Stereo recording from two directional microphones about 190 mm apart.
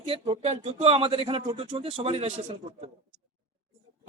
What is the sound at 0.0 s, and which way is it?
A man's voice, 30° right (ahead or behind).